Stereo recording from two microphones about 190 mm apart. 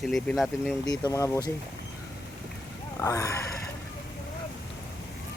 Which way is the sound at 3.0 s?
15° left (ahead or behind).